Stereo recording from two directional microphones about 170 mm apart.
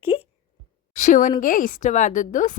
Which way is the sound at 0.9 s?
45° left (ahead or behind).